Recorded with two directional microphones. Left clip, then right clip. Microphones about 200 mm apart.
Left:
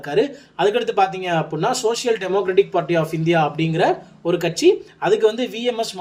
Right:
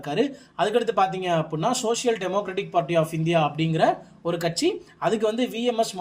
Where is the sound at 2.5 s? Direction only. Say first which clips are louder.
Left 5 dB; 40° right (ahead or behind).